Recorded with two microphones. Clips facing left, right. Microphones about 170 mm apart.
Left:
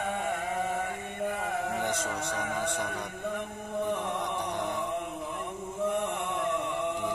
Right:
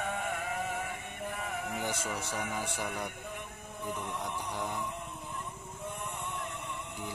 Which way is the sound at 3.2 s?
75° left (ahead or behind).